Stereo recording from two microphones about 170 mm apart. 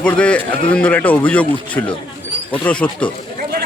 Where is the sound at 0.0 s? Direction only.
5° left (ahead or behind).